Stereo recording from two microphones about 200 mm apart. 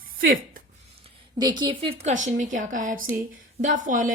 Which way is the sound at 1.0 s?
20° right (ahead or behind).